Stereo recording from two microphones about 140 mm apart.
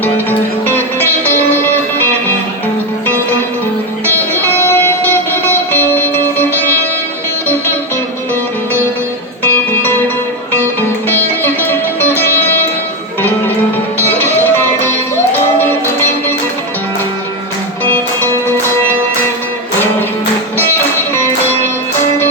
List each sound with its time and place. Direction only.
0.0 s music: 15° left (ahead or behind)
4.0 s music: 15° left (ahead or behind)
9.4 s music: 15° left (ahead or behind)
14.0 s music: 15° left (ahead or behind)
17.8 s music: 15° left (ahead or behind)